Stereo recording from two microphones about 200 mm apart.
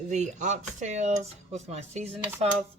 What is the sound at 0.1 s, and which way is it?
Speech, 35° right (ahead or behind).